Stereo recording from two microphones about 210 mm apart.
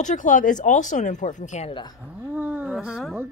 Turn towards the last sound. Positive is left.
turn(degrees=-5)  # may be behind; listen again after turning